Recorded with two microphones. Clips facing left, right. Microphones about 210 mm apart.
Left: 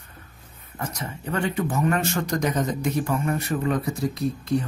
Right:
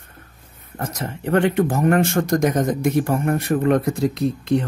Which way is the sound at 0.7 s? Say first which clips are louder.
Right 4 dB; 55° right (ahead or behind).